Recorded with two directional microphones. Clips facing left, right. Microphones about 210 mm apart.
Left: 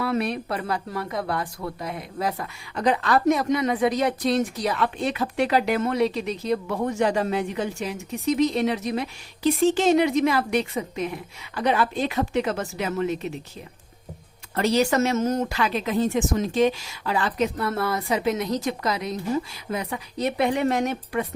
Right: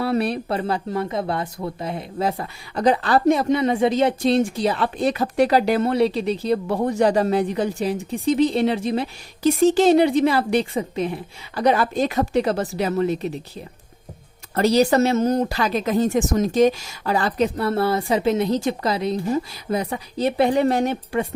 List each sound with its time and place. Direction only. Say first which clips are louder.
0.0 s speech: right 3 dB; 35° right (ahead or behind)
9.4 s speech: right 4 dB; 40° right (ahead or behind)
14.5 s speech: right 4 dB; 35° right (ahead or behind)